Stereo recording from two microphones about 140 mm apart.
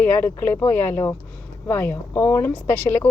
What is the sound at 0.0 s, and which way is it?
Speech, 15° left (ahead or behind).